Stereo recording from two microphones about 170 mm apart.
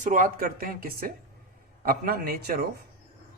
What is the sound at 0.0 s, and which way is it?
Speech, 50° right (ahead or behind).